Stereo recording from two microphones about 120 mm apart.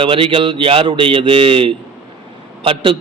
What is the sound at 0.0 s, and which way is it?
A man's voice, 50° right (ahead or behind).